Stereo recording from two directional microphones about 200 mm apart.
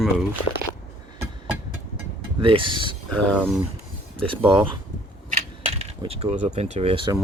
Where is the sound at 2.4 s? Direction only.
25° right (ahead or behind).